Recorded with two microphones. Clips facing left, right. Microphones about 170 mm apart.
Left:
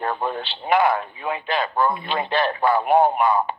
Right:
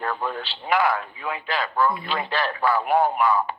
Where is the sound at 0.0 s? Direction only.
20° left (ahead or behind).